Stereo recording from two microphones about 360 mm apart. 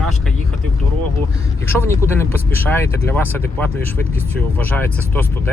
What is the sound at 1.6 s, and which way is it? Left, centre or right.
Speech, centre.